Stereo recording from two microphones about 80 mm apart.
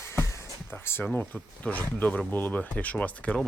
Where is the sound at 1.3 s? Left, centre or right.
Centre.